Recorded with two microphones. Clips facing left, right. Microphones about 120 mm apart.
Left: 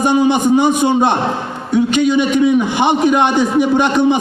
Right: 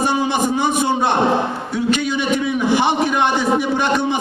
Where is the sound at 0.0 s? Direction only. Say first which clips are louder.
Left 5 dB; 20° left (ahead or behind).